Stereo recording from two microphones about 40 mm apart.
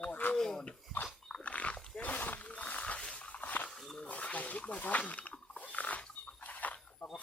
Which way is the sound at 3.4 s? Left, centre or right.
Left.